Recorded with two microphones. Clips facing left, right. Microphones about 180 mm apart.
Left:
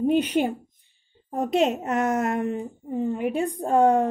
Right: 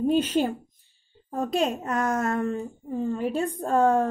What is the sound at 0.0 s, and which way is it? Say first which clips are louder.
A woman's voice: left 1 dB; 15° left (ahead or behind).